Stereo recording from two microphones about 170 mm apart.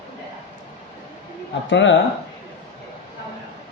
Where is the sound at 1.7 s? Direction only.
90° left.